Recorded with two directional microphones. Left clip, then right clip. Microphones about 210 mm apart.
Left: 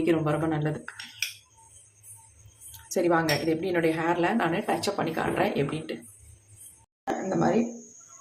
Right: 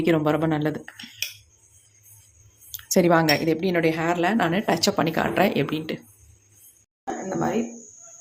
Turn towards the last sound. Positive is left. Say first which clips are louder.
# even
turn(degrees=-5)  # may be behind; listen again after turning